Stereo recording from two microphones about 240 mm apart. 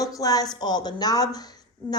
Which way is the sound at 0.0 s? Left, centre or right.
Centre.